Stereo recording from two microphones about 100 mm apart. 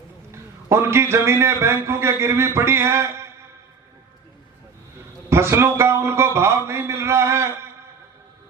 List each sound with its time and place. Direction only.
0.3 s a man's voice: 25° right (ahead or behind)
5.3 s a man's voice: 25° right (ahead or behind)